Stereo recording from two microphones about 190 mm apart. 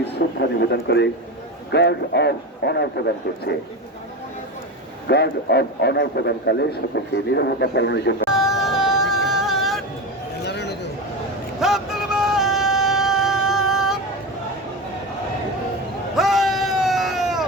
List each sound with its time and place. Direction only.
0.3 s a man's voice: 60° left (ahead or behind)
5.0 s a man's voice: 60° left (ahead or behind)
8.3 s yodeling: centre (ahead or behind)
10.4 s a sound: 60° left (ahead or behind)
11.6 s music: centre (ahead or behind)
16.1 s a sound: centre (ahead or behind)